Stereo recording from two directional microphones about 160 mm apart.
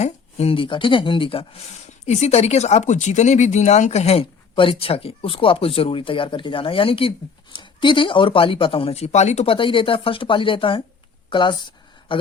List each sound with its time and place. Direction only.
0.0 s speech: 40° left (ahead or behind)